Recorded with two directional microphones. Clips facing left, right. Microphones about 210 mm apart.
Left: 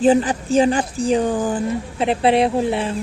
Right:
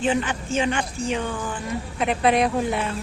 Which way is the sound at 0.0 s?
35° left (ahead or behind).